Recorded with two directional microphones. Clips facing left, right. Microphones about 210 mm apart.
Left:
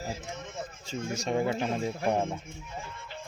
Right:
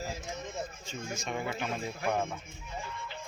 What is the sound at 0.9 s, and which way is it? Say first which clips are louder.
Speech: left 6 dB; 35° left (ahead or behind).